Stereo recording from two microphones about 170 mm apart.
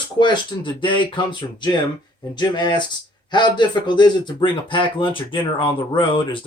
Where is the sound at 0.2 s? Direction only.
30° left (ahead or behind).